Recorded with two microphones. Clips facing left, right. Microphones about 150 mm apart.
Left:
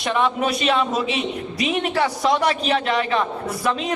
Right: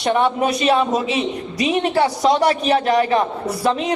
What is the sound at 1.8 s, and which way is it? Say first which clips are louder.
A man's voice: right 4 dB; 35° right (ahead or behind).